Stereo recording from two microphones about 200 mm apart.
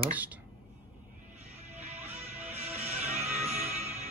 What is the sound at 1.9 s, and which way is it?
Music, 10° right (ahead or behind).